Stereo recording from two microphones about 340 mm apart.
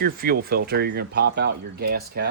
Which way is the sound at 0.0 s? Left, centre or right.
Right.